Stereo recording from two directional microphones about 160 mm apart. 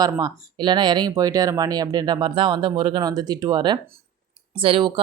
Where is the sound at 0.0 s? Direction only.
25° right (ahead or behind).